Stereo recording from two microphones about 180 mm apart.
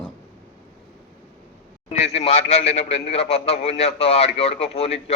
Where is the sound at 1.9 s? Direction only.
40° left (ahead or behind).